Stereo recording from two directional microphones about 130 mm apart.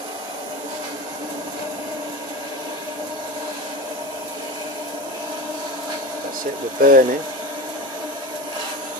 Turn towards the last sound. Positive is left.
turn(degrees=-90)